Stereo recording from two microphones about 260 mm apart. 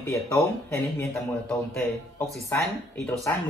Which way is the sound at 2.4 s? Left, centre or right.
Centre.